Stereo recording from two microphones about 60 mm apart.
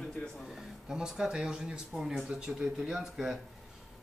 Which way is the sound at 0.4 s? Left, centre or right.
Centre.